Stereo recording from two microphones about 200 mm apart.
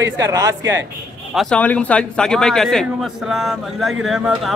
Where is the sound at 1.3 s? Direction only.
Centre (ahead or behind).